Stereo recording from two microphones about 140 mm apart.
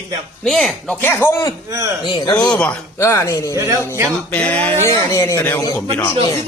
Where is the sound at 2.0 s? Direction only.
30° left (ahead or behind).